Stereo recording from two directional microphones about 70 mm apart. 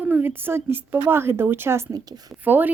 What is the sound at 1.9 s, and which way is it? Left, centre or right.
Speech, right.